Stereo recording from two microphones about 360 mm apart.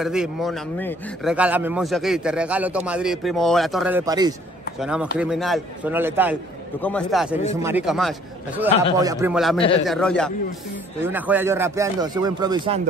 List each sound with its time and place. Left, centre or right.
0.0 s a man's voice: centre
8.6 s a man's voice: centre
8.9 s a man's voice: centre